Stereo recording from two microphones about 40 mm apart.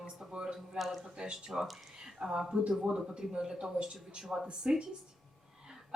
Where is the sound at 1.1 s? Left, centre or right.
Right.